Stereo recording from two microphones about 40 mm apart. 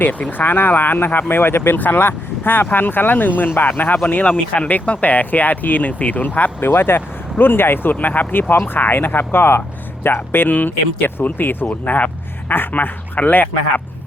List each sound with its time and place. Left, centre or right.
0.0 s speech: left
1.8 s speech: left
3.5 s speech: left
4.0 s speech: left
6.6 s speech: left
8.0 s speech: left
13.1 s speech: left